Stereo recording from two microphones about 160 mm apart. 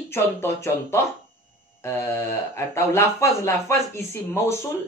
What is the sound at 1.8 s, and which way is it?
Speech, 15° left (ahead or behind).